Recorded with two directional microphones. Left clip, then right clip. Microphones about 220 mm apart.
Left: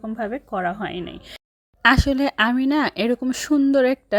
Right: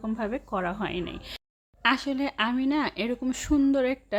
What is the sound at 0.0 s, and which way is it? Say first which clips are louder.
Speech: left 4 dB; 10° left (ahead or behind).